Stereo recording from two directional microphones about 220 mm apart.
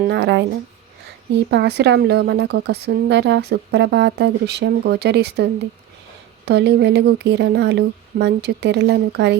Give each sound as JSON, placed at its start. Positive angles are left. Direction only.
{"t": 0.0, "sound": "speech", "side_deg": -50}